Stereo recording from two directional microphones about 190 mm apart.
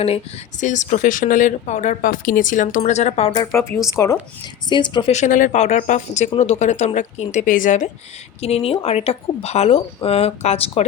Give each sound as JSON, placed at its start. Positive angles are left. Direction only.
{"t": 0.6, "sound": "speech", "side_deg": 40}
{"t": 3.3, "sound": "a woman's voice", "side_deg": 15}
{"t": 5.1, "sound": "speech", "side_deg": 40}